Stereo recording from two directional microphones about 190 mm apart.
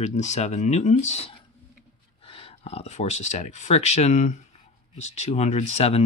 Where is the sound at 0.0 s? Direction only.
40° left (ahead or behind).